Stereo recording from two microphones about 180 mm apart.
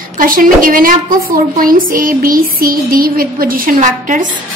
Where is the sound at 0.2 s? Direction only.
50° right (ahead or behind).